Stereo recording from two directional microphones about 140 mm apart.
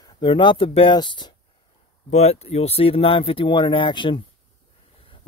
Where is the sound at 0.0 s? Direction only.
35° left (ahead or behind).